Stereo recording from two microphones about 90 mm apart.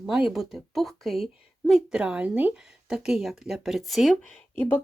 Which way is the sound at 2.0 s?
15° right (ahead or behind).